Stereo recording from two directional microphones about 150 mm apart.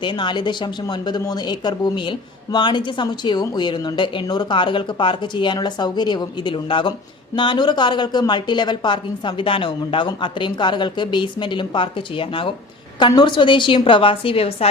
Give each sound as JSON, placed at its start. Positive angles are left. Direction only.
{"t": 0.0, "sound": "speech", "side_deg": 30}